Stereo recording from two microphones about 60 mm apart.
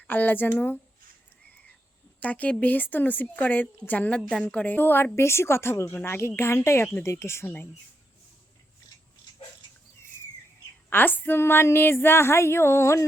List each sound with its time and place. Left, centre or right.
0.1 s speech: left
2.2 s a woman's voice: left
5.1 s speech: left
10.8 s speech: left